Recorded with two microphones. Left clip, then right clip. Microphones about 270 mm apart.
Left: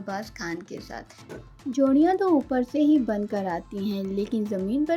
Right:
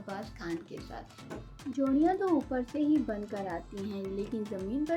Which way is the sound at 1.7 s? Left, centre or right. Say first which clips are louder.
Left 7 dB; left.